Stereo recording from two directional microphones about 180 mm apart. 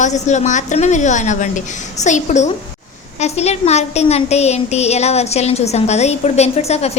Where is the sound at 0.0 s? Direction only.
40° left (ahead or behind).